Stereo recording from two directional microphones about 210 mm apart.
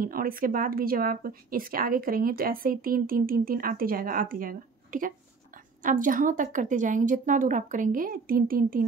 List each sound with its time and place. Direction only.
0.0 s a woman's voice: 45° right (ahead or behind)